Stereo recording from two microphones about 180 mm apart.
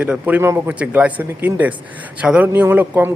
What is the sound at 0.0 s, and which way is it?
A man's voice, 10° right (ahead or behind).